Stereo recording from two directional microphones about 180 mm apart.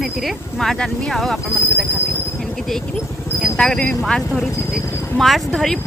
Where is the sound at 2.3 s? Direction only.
Centre (ahead or behind).